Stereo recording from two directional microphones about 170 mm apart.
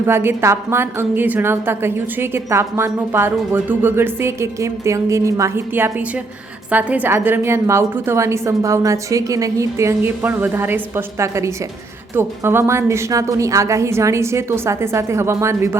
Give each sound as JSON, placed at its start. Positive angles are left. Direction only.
{"t": 0.0, "sound": "a woman's voice", "side_deg": -15}